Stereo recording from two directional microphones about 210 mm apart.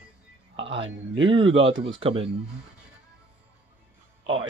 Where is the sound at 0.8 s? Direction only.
25° right (ahead or behind).